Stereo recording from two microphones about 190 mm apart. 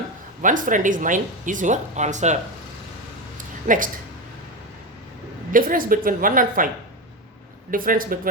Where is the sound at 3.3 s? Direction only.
45° right (ahead or behind).